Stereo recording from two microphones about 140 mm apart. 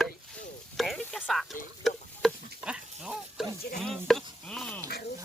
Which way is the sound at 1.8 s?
Centre (ahead or behind).